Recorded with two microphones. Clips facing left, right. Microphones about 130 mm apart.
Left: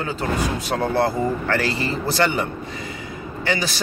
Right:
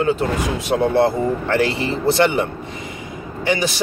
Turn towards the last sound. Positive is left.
turn(degrees=-20)  # may be behind; listen again after turning